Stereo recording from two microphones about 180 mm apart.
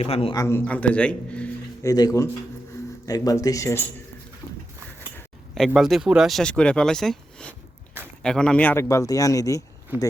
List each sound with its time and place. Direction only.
0.0 s a man's voice: 35° left (ahead or behind)
0.3 s a man's voice: 15° left (ahead or behind)
1.8 s speech: 20° left (ahead or behind)
5.1 s a man's voice: centre (ahead or behind); by 9.6 s 20° left (ahead or behind)